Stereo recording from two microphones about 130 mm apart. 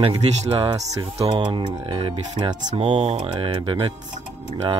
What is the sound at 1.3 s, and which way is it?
Speech, 35° right (ahead or behind).